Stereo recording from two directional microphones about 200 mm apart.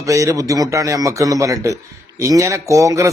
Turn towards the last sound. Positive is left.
turn(degrees=-15)  # may be behind; listen again after turning